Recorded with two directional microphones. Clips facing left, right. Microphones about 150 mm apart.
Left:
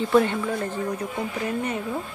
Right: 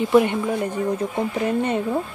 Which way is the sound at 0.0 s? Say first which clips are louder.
Right 3 dB; 15° right (ahead or behind).